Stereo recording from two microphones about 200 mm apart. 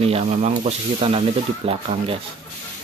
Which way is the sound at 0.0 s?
30° right (ahead or behind).